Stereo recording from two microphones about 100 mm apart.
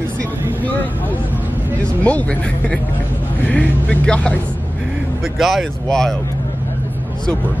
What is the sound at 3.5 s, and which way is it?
Speech, 10° left (ahead or behind).